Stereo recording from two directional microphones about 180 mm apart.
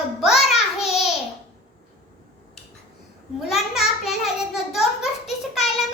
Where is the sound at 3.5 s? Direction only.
Centre (ahead or behind).